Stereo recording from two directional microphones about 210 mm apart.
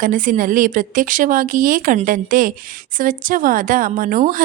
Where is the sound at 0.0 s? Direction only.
40° right (ahead or behind).